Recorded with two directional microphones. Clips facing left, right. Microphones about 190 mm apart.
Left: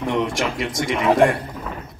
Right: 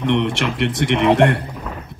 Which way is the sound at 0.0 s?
70° right (ahead or behind).